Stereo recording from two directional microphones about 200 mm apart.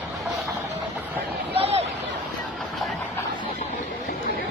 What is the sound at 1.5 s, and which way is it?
Hubbub, 30° right (ahead or behind).